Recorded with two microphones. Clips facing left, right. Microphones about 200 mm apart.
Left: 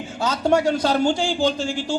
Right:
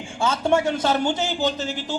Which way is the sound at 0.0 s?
25° right (ahead or behind).